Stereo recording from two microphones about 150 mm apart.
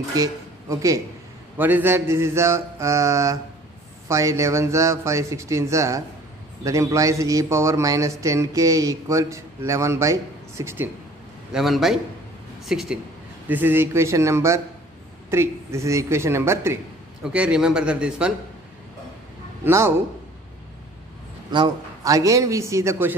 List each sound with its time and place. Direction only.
0.1 s speech: 20° right (ahead or behind)
1.6 s mantra: 15° right (ahead or behind)
4.1 s a man's voice: 20° right (ahead or behind)
10.6 s mantra: 15° right (ahead or behind)
11.5 s a man's voice: centre (ahead or behind)
13.5 s mantra: 15° right (ahead or behind)
19.6 s mantra: 20° right (ahead or behind)
21.5 s a man's voice: 30° right (ahead or behind)